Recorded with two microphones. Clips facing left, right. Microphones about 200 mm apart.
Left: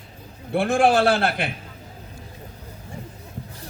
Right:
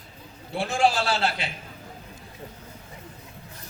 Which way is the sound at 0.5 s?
55° left (ahead or behind).